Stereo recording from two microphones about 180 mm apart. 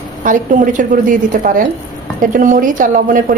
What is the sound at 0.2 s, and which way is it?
Speech, 45° right (ahead or behind).